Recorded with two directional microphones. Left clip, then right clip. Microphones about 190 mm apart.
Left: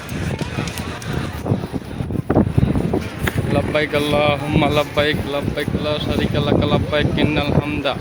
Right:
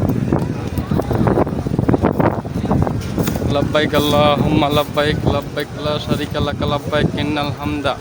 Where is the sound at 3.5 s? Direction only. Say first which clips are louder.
Right 2 dB; 10° right (ahead or behind).